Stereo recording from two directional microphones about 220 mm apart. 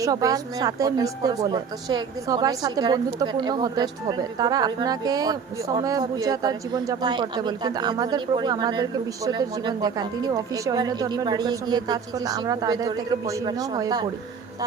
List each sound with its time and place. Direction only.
0.0 s speech: 15° right (ahead or behind)